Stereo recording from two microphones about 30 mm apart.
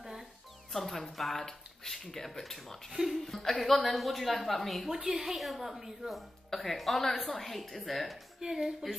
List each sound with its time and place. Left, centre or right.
0.7 s speech: centre
2.9 s a woman's voice: centre
3.2 s a woman's voice: centre
4.8 s a woman's voice: centre
6.5 s a woman's voice: centre
8.4 s a woman's voice: right
8.8 s a woman's voice: centre